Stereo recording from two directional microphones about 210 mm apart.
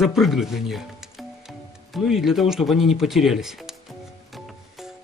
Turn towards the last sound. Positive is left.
turn(degrees=0)  # may be behind; listen again after turning